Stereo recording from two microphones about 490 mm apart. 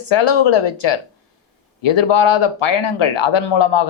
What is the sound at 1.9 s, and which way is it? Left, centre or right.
Speech, left.